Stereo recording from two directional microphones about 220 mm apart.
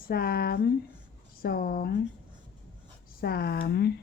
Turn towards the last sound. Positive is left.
turn(degrees=45)  # may be behind; listen again after turning